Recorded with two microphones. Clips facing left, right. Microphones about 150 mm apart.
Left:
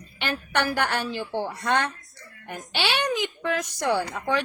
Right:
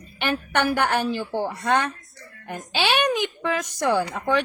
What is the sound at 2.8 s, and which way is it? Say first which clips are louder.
Speech: right 4 dB; 70° right (ahead or behind).